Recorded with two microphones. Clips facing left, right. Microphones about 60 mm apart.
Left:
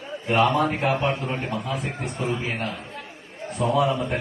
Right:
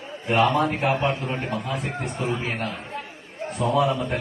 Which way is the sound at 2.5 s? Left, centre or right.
Right.